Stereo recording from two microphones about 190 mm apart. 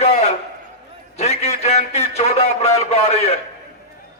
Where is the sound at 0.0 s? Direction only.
35° left (ahead or behind).